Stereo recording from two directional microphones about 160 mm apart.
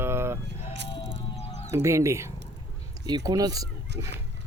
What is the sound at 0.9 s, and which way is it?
Music, 40° left (ahead or behind).